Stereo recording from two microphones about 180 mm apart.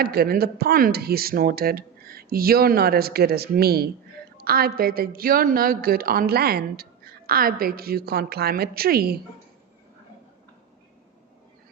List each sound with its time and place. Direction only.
0.0 s a woman's voice: 60° right (ahead or behind)